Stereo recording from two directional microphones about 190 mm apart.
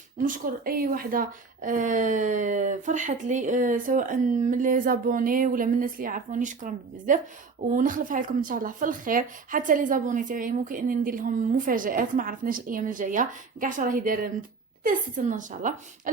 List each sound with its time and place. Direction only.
0.3 s speech: 50° right (ahead or behind)